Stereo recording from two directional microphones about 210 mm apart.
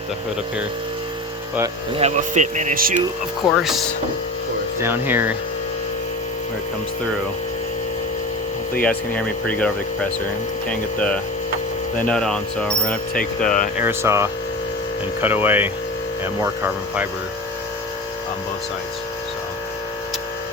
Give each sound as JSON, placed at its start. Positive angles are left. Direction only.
{"t": 2.0, "sound": "speech", "side_deg": -30}
{"t": 3.6, "sound": "speech", "side_deg": 0}
{"t": 8.8, "sound": "speech", "side_deg": 5}
{"t": 13.1, "sound": "speech", "side_deg": 40}
{"t": 13.7, "sound": "speech", "side_deg": -10}